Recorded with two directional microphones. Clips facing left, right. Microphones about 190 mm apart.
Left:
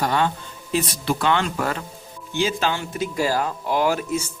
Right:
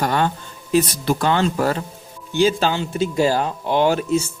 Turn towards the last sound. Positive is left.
turn(degrees=-25)  # may be behind; listen again after turning